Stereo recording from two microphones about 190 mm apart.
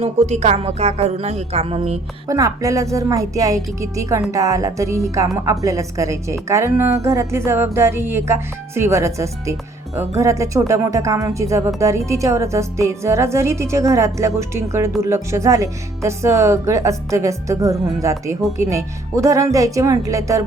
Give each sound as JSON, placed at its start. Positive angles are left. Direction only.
{"t": 0.0, "sound": "speech", "side_deg": -35}
{"t": 2.2, "sound": "a woman's voice", "side_deg": -15}